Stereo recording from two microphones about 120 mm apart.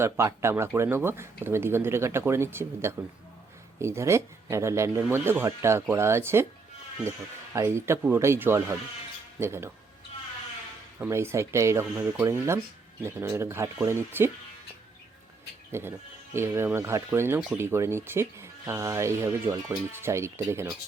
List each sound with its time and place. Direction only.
0.0 s speech: 20° right (ahead or behind)
7.5 s speech: 20° right (ahead or behind)
11.0 s speech: 20° right (ahead or behind)
15.7 s speech: 20° right (ahead or behind)